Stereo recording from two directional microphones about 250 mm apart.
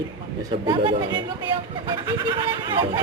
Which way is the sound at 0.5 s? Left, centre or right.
Centre.